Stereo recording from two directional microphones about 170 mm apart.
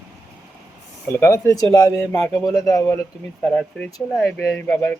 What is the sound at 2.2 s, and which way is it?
Speech, centre (ahead or behind).